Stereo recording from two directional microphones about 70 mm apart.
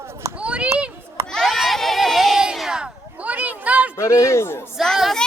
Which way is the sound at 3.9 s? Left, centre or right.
Left.